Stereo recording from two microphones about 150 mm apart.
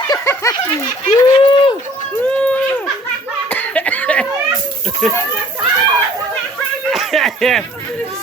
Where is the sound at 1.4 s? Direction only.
35° left (ahead or behind).